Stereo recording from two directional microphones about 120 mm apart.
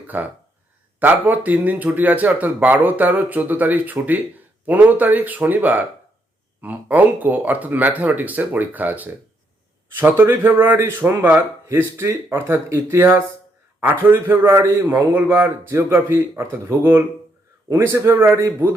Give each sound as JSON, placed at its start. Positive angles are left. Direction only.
{"t": 0.1, "sound": "a man's voice", "side_deg": -15}